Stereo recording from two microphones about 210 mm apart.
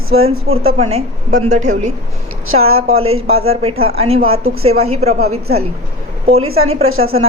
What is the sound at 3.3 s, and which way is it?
Speech, 30° right (ahead or behind).